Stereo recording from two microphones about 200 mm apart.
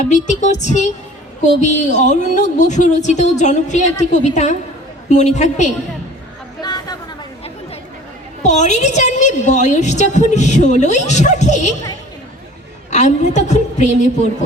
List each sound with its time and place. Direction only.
0.0 s a woman's voice: 35° left (ahead or behind)
6.6 s a sound: 20° left (ahead or behind)
8.4 s a woman's voice: 35° left (ahead or behind)
12.9 s a woman's voice: 35° left (ahead or behind)